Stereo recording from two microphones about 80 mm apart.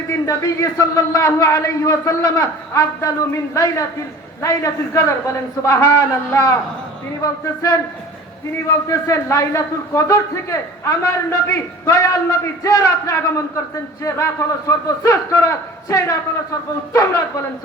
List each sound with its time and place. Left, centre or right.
0.1 s a man's voice: left
8.9 s a man's voice: left